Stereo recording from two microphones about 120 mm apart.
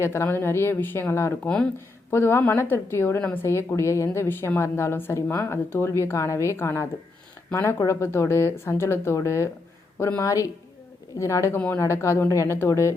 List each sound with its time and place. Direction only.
0.0 s a woman's voice: 20° left (ahead or behind)